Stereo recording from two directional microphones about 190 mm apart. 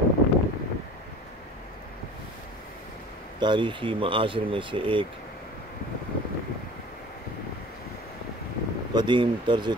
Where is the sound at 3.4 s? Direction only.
25° right (ahead or behind).